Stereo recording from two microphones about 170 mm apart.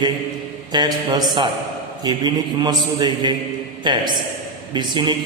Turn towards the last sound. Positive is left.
turn(degrees=-25)  # may be behind; listen again after turning